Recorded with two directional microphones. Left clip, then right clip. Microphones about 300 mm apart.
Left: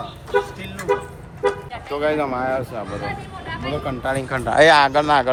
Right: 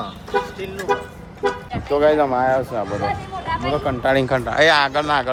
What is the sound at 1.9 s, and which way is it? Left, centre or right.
Speech, centre.